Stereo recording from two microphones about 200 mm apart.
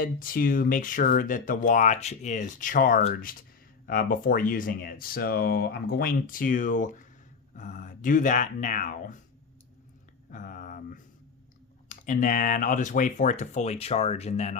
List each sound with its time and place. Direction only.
0.0 s speech: 45° left (ahead or behind)
10.3 s speech: 40° left (ahead or behind)